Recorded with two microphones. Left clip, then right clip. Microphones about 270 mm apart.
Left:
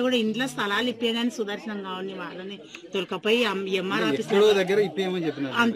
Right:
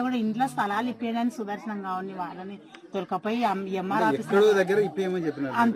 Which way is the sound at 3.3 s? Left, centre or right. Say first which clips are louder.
Left 6 dB; centre.